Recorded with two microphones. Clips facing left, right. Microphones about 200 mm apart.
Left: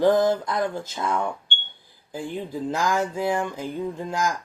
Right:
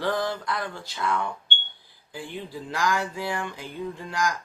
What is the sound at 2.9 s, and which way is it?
Speech, 45° left (ahead or behind).